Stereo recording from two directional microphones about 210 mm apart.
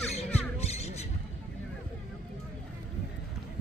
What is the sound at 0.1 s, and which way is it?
Music, 30° left (ahead or behind).